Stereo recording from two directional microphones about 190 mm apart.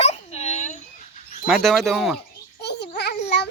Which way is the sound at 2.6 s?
60° left (ahead or behind).